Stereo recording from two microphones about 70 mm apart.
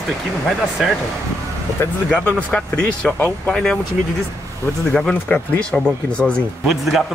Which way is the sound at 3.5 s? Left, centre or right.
Centre.